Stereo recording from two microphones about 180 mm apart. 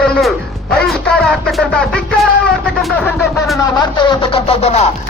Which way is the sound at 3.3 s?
Centre (ahead or behind).